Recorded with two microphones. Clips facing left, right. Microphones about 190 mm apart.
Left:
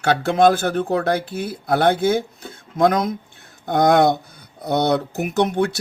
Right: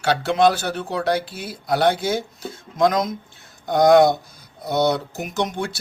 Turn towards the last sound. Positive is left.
turn(degrees=60)  # may be behind; listen again after turning